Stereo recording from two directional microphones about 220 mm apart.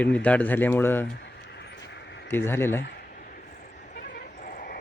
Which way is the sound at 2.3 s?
10° left (ahead or behind).